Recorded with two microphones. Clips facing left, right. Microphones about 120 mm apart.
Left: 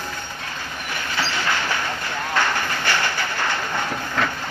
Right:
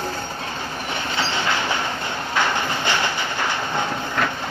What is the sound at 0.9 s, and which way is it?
Train, 25° right (ahead or behind).